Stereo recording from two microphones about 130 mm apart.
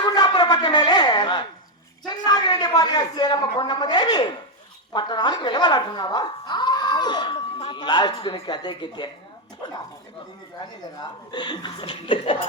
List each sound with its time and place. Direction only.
0.0 s shofar: 35° left (ahead or behind)
2.0 s a sound: 30° left (ahead or behind)
4.9 s speech: 35° left (ahead or behind)
11.0 s speech: 35° left (ahead or behind)